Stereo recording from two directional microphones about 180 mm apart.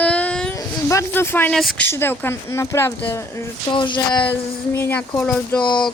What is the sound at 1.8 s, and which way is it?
Speech, 10° left (ahead or behind).